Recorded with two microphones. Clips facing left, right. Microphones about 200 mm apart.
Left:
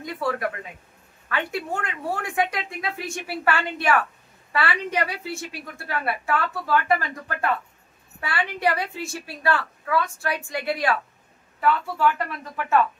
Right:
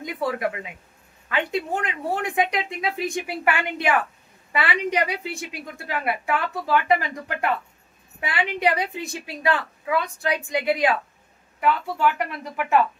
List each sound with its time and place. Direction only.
0.0 s a woman's voice: 15° right (ahead or behind)